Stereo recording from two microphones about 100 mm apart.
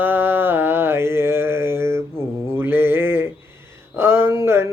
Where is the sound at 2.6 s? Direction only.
25° right (ahead or behind).